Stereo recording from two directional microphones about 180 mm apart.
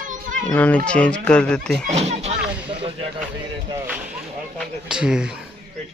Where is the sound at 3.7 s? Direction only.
5° right (ahead or behind).